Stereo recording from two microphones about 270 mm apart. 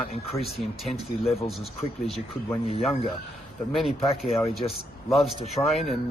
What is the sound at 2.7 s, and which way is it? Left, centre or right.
Speech, left.